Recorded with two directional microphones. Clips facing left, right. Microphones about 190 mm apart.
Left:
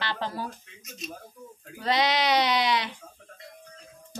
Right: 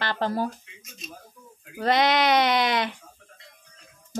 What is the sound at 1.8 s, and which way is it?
A woman's voice, 55° right (ahead or behind).